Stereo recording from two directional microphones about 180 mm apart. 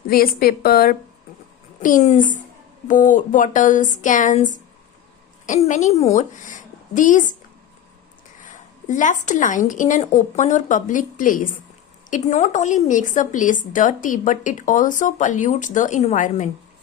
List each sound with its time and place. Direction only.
0.1 s a woman's voice: 55° left (ahead or behind)
1.8 s a woman's voice: 40° left (ahead or behind)
8.4 s a woman's voice: 45° left (ahead or behind)